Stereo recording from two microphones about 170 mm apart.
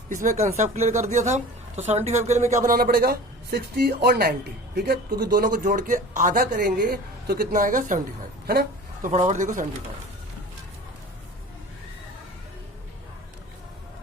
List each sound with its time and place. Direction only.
0.1 s speech: 45° right (ahead or behind)